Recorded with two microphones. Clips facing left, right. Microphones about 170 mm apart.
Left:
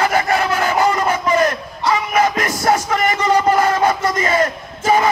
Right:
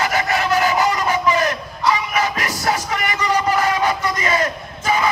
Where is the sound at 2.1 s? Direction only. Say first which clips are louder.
Left 5 dB; 50° left (ahead or behind).